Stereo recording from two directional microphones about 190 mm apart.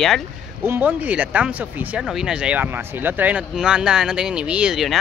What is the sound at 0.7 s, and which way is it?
Speech, 10° right (ahead or behind).